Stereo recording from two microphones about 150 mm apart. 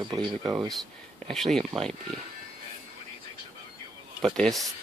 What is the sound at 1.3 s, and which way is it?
Speech, centre (ahead or behind).